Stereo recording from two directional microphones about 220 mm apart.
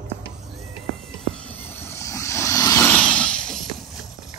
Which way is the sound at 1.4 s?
10° left (ahead or behind).